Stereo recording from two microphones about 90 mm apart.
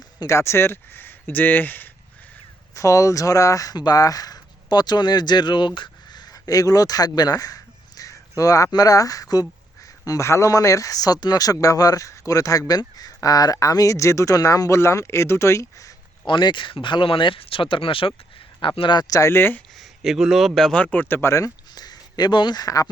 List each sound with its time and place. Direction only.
0.3 s speech: 30° left (ahead or behind)
2.7 s speech: 35° left (ahead or behind)
16.2 s speech: 60° left (ahead or behind); by 18.1 s 85° left
18.8 s speech: 55° left (ahead or behind)
19.3 s speech: 25° left (ahead or behind)
19.8 s speech: centre (ahead or behind)
20.8 s speech: 20° left (ahead or behind)
21.8 s speech: 50° left (ahead or behind)